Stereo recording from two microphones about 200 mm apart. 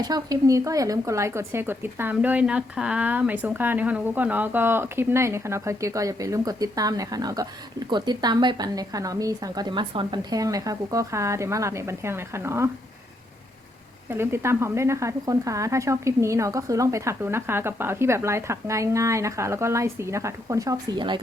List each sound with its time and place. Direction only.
0.0 s speech: 20° right (ahead or behind)
14.1 s speech: 10° right (ahead or behind)